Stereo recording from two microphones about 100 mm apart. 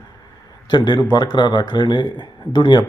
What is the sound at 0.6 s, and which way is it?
Speech, 45° left (ahead or behind).